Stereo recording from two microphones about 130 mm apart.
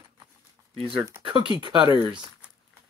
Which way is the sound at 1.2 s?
40° right (ahead or behind).